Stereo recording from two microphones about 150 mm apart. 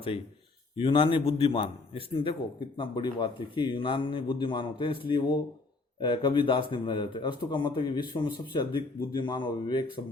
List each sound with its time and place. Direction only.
0.8 s a man's voice: 35° left (ahead or behind)